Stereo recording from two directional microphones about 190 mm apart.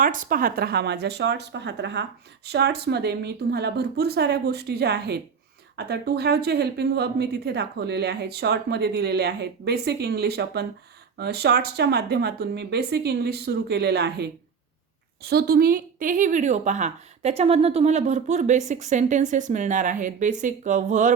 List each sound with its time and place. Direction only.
0.0 s speech: 45° right (ahead or behind)